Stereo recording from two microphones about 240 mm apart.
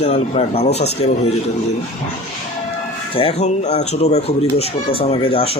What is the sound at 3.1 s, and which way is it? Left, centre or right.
Speech, left.